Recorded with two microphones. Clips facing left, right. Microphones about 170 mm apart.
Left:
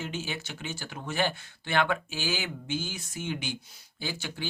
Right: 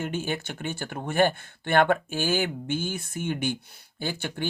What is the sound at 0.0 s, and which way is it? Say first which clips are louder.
Speech: right 6 dB; 55° right (ahead or behind).